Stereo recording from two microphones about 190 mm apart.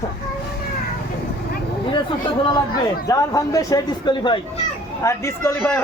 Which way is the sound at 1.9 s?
25° left (ahead or behind).